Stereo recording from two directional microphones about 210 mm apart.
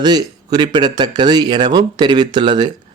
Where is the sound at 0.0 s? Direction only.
20° right (ahead or behind).